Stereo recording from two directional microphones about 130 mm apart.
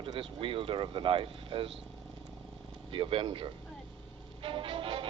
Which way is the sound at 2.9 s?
45° right (ahead or behind).